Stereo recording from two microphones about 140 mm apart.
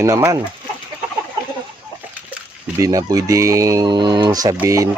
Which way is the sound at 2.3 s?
20° right (ahead or behind).